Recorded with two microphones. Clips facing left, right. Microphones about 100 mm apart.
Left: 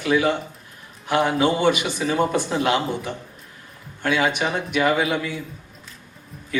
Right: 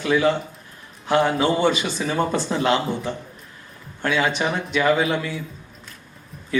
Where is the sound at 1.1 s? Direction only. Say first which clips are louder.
Right 1 dB; 15° left (ahead or behind).